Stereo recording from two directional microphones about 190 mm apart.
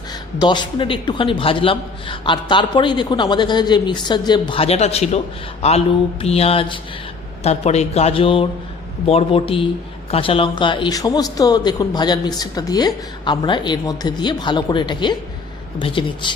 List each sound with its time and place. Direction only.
0.3 s speech: 25° left (ahead or behind)
5.6 s mantra: 35° left (ahead or behind)
9.0 s speech: 30° left (ahead or behind)